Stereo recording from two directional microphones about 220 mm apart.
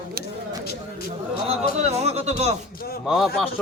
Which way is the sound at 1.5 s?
30° right (ahead or behind).